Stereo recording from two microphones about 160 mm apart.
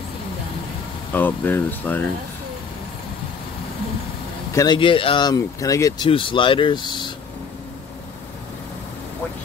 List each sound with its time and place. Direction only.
1.1 s speech: 10° left (ahead or behind)
4.5 s speech: 20° left (ahead or behind)
4.7 s speech: 35° left (ahead or behind)
6.0 s speech: 35° left (ahead or behind)